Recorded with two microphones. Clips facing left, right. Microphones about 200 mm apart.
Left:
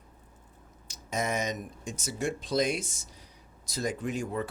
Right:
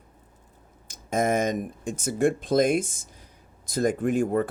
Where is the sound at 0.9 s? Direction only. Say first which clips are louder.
Right 8 dB; 50° right (ahead or behind).